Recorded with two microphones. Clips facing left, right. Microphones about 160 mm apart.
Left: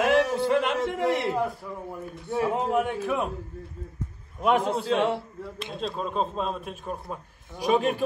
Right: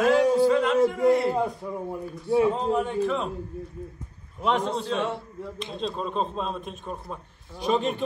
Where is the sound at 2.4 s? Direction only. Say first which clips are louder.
Right 1 dB; 10° left (ahead or behind).